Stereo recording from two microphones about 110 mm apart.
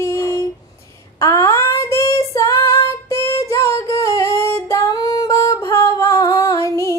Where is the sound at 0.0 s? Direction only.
25° left (ahead or behind).